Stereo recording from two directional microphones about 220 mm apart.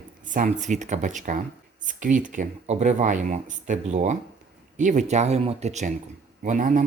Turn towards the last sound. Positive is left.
turn(degrees=-35)  # may be behind; listen again after turning